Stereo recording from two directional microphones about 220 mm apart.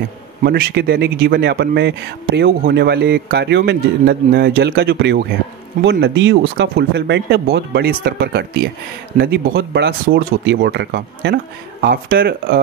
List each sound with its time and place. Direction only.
0.4 s speech: 45° right (ahead or behind)